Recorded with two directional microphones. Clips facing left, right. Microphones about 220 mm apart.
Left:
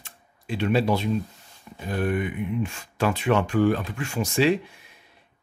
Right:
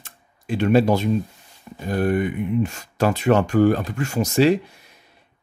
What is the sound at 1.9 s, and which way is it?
Speech, 40° right (ahead or behind).